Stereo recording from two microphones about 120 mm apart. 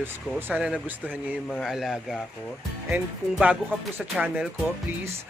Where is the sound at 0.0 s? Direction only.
15° right (ahead or behind).